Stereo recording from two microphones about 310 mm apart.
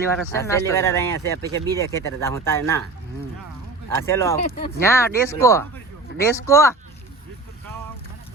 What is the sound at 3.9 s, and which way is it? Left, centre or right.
Speech, centre.